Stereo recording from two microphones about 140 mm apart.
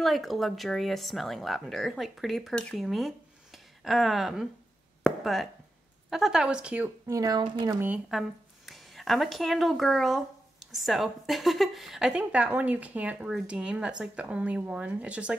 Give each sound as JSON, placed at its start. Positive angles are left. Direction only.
{"t": 0.0, "sound": "speech", "side_deg": 0}
{"t": 5.0, "sound": "a sound", "side_deg": 0}
{"t": 6.0, "sound": "a woman's voice", "side_deg": -5}
{"t": 7.1, "sound": "speech", "side_deg": -25}
{"t": 8.1, "sound": "speech", "side_deg": 0}